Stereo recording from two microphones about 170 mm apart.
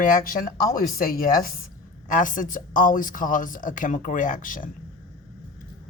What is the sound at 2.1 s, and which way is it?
Speech, 50° left (ahead or behind).